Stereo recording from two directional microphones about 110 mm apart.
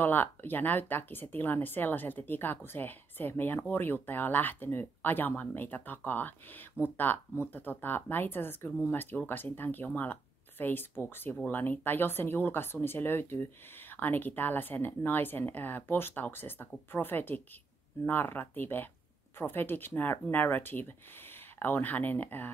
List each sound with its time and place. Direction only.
0.0 s speech: 15° left (ahead or behind)